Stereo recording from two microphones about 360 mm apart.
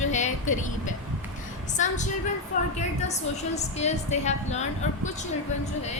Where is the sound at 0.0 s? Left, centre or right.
Centre.